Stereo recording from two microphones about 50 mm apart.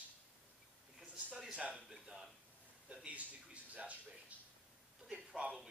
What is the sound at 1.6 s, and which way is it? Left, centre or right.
Speech, right.